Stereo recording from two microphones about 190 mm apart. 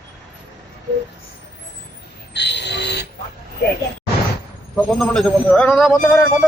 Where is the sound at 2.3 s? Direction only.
65° left (ahead or behind).